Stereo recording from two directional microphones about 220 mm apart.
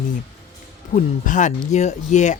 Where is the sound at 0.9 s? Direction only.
35° left (ahead or behind).